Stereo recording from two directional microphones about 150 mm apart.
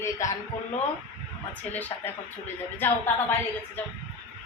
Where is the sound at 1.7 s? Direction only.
10° left (ahead or behind).